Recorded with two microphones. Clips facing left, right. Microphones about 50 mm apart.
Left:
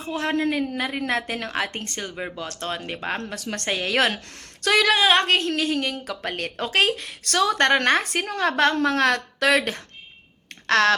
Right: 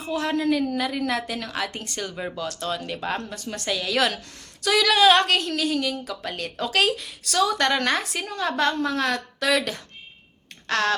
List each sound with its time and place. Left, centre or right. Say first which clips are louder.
0.0 s a woman's voice: even; left
2.0 s speech: right 3 dB; left
2.5 s a woman's voice: right 1 dB; left
3.3 s a woman's voice: left 2 dB; left
3.7 s a woman's voice: left 1 dB; left
4.9 s a woman's voice: right 4 dB; left
9.6 s a woman's voice: left 2 dB; left
10.7 s speech: left 5 dB; left